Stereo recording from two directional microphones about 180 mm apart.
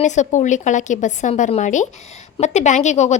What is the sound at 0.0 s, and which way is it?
A woman's voice, 40° left (ahead or behind).